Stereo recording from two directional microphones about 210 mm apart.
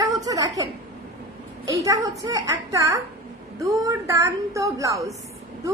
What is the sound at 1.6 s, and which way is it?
A woman's voice, 15° right (ahead or behind).